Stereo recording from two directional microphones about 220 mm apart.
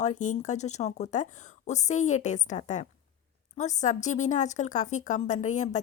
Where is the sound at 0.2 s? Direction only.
35° left (ahead or behind).